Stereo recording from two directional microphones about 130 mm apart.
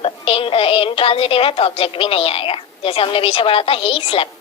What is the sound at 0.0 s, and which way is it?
A woman's voice, 45° left (ahead or behind).